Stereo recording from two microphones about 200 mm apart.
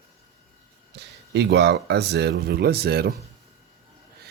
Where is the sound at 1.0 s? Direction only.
55° right (ahead or behind).